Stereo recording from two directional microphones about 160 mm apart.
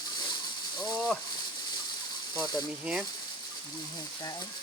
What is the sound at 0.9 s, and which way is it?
Speech, centre (ahead or behind).